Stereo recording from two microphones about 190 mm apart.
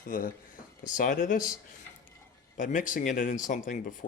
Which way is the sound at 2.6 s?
40° left (ahead or behind).